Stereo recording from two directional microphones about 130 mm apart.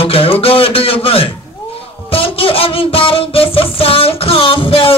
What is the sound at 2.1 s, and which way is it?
Music, 45° left (ahead or behind).